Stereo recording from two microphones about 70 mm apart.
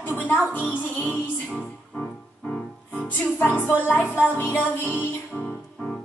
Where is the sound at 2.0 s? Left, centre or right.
Centre.